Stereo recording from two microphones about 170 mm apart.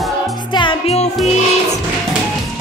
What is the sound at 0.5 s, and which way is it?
Music, 30° left (ahead or behind).